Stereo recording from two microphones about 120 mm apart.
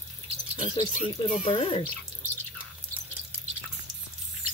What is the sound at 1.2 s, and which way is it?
Speech, 50° left (ahead or behind).